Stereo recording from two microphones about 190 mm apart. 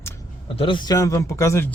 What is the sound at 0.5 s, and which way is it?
Speech, 25° left (ahead or behind).